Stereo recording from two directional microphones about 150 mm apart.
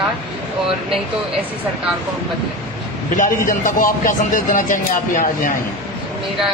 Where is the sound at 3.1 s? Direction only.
60° left (ahead or behind).